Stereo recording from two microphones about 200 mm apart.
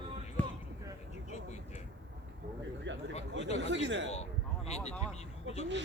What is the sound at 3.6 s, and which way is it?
Speech, 65° right (ahead or behind).